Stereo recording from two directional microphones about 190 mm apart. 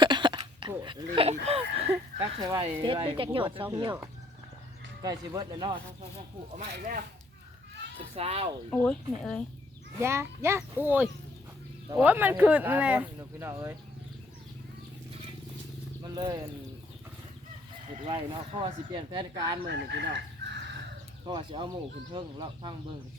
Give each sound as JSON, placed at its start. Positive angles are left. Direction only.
{"t": 0.0, "sound": "a sound", "side_deg": -25}
{"t": 0.7, "sound": "speech", "side_deg": -20}
{"t": 5.0, "sound": "speech", "side_deg": -20}
{"t": 6.6, "sound": "speech", "side_deg": -45}
{"t": 8.1, "sound": "speech", "side_deg": -30}
{"t": 8.7, "sound": "speech", "side_deg": 5}
{"t": 9.9, "sound": "speech", "side_deg": -15}
{"t": 16.1, "sound": "speech", "side_deg": -20}
{"t": 17.8, "sound": "speech", "side_deg": -30}
{"t": 19.6, "sound": "speech", "side_deg": -65}
{"t": 21.2, "sound": "speech", "side_deg": -25}